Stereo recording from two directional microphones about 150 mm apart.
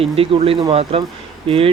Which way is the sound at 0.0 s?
40° right (ahead or behind).